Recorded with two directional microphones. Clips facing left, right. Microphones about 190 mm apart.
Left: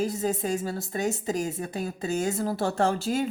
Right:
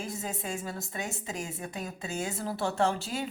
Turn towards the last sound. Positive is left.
turn(degrees=45)  # may be behind; listen again after turning